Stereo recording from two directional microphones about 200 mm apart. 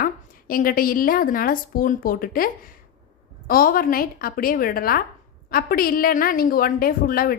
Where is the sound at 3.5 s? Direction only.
45° left (ahead or behind).